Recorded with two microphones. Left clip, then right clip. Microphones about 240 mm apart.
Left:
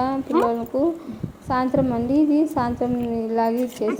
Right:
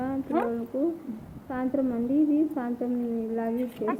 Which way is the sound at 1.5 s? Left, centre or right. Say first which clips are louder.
Left 8 dB; centre.